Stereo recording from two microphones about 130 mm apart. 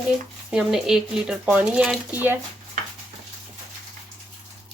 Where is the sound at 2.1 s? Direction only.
15° right (ahead or behind).